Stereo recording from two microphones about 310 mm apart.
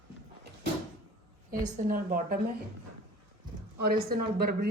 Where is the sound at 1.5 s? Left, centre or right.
Right.